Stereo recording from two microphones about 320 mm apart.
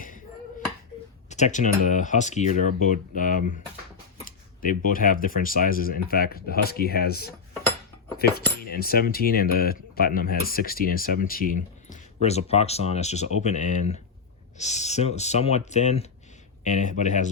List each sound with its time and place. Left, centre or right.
1.3 s speech: left